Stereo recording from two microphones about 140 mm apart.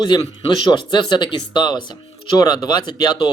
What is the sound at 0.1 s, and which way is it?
Speech, 30° left (ahead or behind).